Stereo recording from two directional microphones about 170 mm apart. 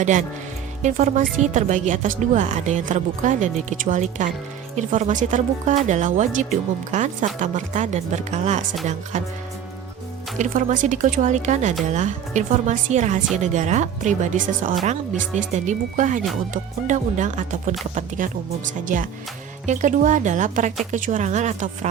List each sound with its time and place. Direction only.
0.0 s a woman's voice: 45° right (ahead or behind)
10.3 s a woman's voice: 50° right (ahead or behind)
19.6 s a woman's voice: 50° right (ahead or behind)